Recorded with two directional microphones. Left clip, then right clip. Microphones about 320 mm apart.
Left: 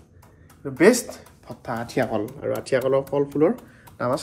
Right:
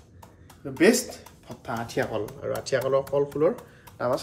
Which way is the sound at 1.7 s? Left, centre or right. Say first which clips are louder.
Left 4 dB; centre.